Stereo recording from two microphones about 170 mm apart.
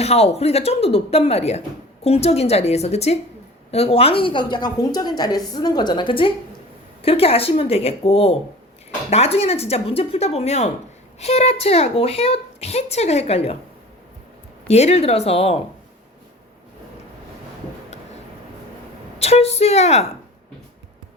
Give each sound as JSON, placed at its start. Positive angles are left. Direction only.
{"t": 0.0, "sound": "a woman's voice", "side_deg": 40}
{"t": 14.7, "sound": "a woman's voice", "side_deg": 40}
{"t": 19.2, "sound": "a woman's voice", "side_deg": 40}